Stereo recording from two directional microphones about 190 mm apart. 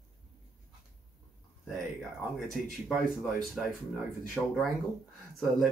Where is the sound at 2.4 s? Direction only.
Centre (ahead or behind).